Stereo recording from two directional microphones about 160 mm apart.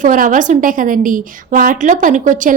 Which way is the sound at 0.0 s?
55° right (ahead or behind).